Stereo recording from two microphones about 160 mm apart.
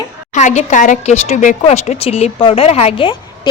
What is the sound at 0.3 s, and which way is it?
A woman's voice, 50° left (ahead or behind).